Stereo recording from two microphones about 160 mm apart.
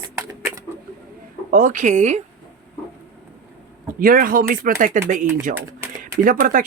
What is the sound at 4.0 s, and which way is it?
Speech, 65° right (ahead or behind).